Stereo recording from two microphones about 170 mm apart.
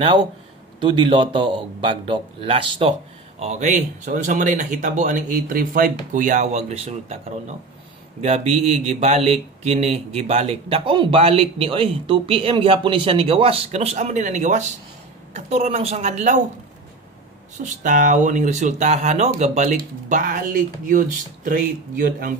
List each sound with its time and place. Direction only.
0.7 s a man's voice: 30° right (ahead or behind)
3.3 s speech: 40° right (ahead or behind)
17.6 s speech: 50° right (ahead or behind)
19.8 s speech: 55° right (ahead or behind)